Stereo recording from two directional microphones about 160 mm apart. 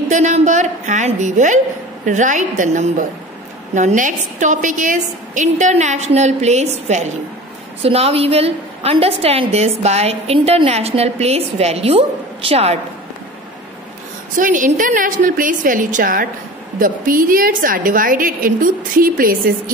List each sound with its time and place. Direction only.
0.1 s a woman's voice: 50° right (ahead or behind)
14.3 s a woman's voice: 55° right (ahead or behind)